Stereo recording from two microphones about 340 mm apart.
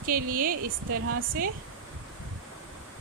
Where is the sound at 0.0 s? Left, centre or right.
Right.